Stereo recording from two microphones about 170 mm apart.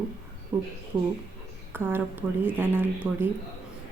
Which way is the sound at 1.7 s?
10° right (ahead or behind).